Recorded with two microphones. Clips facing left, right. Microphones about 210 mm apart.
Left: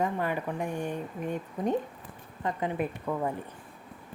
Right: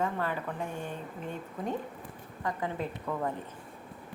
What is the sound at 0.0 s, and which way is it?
A woman's voice, 15° left (ahead or behind).